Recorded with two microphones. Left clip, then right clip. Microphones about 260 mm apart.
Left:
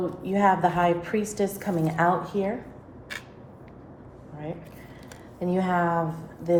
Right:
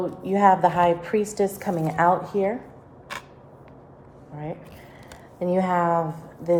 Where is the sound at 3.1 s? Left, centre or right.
Centre.